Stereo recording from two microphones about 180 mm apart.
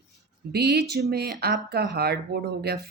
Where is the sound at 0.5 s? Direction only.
65° right (ahead or behind).